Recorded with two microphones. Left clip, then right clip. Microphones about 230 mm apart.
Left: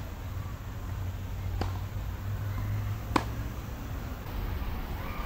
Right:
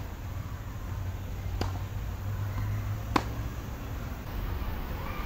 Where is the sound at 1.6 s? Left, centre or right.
Right.